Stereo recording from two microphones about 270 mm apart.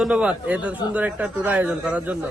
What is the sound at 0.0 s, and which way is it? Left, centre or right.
A man's voice, centre.